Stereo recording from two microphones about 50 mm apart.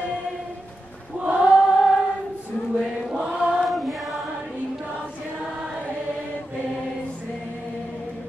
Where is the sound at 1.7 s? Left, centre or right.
Centre.